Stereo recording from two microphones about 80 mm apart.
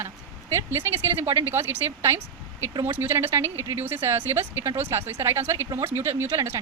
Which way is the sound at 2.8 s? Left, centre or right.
Right.